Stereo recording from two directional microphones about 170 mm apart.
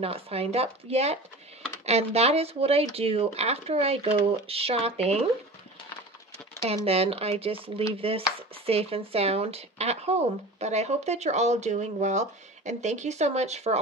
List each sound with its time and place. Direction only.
0.0 s speech: 35° right (ahead or behind)
6.7 s speech: 35° right (ahead or behind)